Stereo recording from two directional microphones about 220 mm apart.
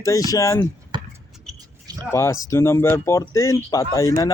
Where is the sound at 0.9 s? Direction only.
20° right (ahead or behind).